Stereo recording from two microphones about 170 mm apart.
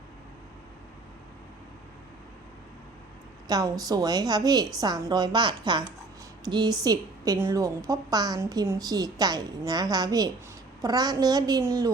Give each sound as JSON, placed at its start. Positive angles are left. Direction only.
{"t": 3.5, "sound": "a woman's voice", "side_deg": -20}